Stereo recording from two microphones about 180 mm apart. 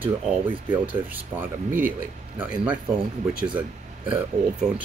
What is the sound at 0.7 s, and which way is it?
Speech, 10° right (ahead or behind).